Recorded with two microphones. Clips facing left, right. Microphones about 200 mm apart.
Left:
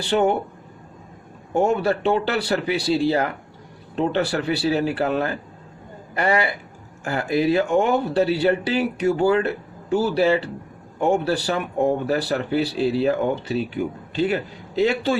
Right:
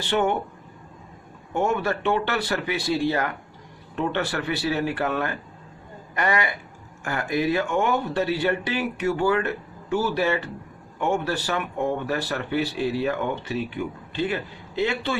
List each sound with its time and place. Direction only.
0.0 s speech: 35° left (ahead or behind)
1.5 s speech: 35° left (ahead or behind)